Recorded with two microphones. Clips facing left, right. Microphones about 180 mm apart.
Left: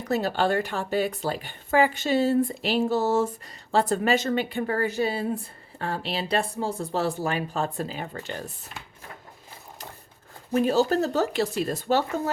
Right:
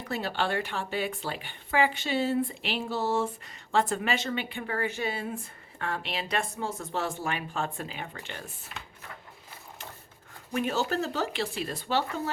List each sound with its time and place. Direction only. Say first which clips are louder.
0.1 s a woman's voice: left 6 dB; 40° left (ahead or behind)
10.5 s speech: left 7 dB; 35° left (ahead or behind)